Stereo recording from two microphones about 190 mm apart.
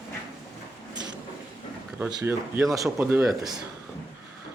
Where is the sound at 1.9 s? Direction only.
10° right (ahead or behind).